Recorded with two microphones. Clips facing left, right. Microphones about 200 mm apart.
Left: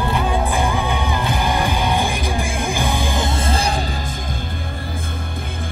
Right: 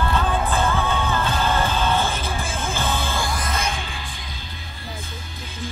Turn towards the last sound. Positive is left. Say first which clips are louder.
# left 5 dB
turn(degrees=30)  # may be behind; listen again after turning